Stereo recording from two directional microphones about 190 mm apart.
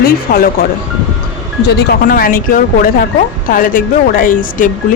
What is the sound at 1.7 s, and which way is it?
A woman's voice, 55° left (ahead or behind).